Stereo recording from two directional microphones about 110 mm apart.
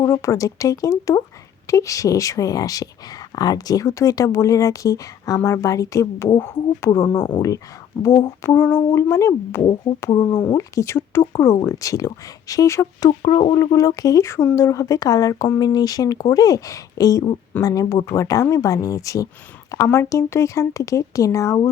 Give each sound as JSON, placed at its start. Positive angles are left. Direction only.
{"t": 0.0, "sound": "speech", "side_deg": 25}
{"t": 7.9, "sound": "speech", "side_deg": 15}
{"t": 10.1, "sound": "speech", "side_deg": 40}
{"t": 10.5, "sound": "speech", "side_deg": 30}
{"t": 13.1, "sound": "speech", "side_deg": 50}
{"t": 13.6, "sound": "speech", "side_deg": 35}